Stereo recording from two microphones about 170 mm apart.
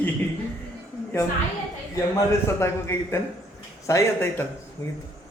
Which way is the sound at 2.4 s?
15° left (ahead or behind).